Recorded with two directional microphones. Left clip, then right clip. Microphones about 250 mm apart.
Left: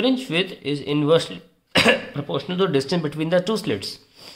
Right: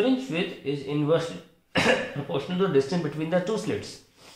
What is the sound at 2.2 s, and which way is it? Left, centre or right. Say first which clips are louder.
Speech: left 6 dB; left.